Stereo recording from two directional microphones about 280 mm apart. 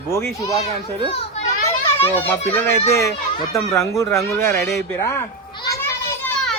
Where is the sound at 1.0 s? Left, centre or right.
Left.